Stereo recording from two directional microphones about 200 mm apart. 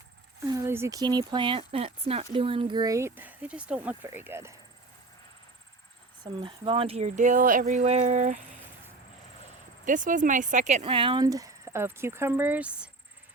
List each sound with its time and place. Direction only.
0.4 s speech: 10° right (ahead or behind)
6.2 s a sound: 25° right (ahead or behind)
9.8 s speech: 40° right (ahead or behind); by 12.9 s 5° right (ahead or behind)